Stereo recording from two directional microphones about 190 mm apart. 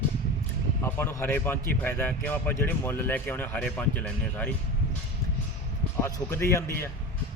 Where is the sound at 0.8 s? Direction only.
10° left (ahead or behind).